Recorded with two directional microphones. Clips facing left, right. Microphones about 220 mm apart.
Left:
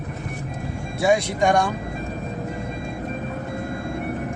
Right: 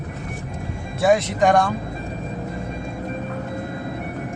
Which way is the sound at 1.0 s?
Centre (ahead or behind).